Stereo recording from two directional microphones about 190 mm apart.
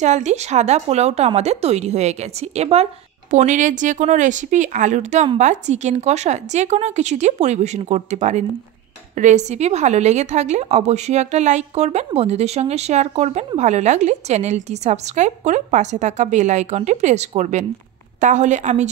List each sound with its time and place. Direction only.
0.0 s speech: 35° right (ahead or behind)